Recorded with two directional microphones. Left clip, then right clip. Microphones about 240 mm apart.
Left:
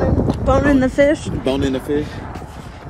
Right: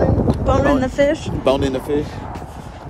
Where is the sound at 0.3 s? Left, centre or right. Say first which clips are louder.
Left 3 dB; right.